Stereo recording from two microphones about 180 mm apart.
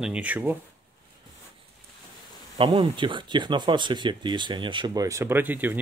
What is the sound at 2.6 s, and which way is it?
Speech, 30° right (ahead or behind).